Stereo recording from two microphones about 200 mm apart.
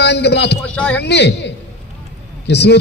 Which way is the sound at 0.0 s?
60° left (ahead or behind).